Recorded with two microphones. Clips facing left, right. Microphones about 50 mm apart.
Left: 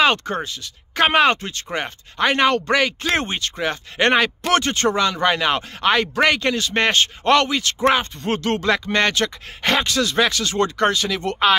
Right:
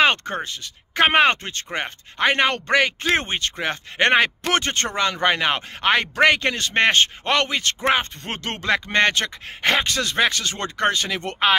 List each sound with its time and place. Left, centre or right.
0.0 s speech: right